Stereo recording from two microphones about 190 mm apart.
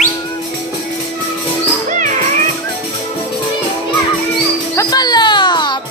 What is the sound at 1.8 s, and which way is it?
Music, 45° right (ahead or behind).